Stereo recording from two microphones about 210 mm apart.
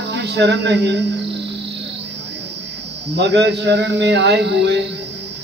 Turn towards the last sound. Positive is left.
turn(degrees=-55)  # may be behind; listen again after turning